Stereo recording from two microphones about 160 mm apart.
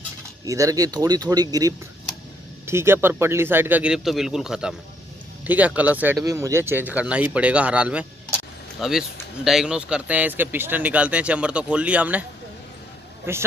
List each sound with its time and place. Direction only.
0.5 s speech: 20° right (ahead or behind)
6.1 s speech: 20° right (ahead or behind)